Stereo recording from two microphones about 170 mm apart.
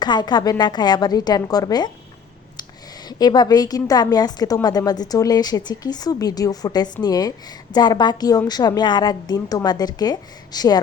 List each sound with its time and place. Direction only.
0.0 s a woman's voice: 25° left (ahead or behind)
3.1 s a woman's voice: 25° left (ahead or behind)